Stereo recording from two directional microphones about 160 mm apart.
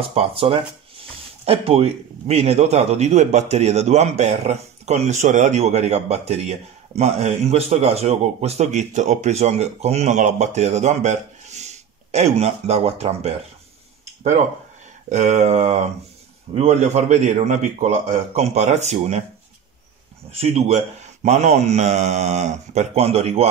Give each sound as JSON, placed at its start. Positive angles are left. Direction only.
{"t": 0.0, "sound": "a man's voice", "side_deg": -35}
{"t": 15.0, "sound": "a man's voice", "side_deg": -50}
{"t": 20.2, "sound": "a man's voice", "side_deg": -40}